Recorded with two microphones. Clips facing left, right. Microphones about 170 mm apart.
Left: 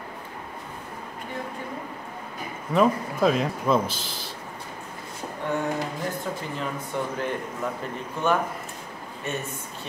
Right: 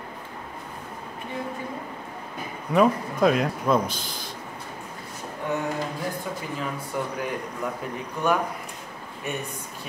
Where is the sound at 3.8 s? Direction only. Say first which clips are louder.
Even; 50° right (ahead or behind).